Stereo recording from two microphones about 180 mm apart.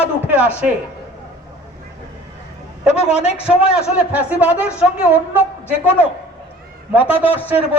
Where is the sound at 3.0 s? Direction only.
35° left (ahead or behind).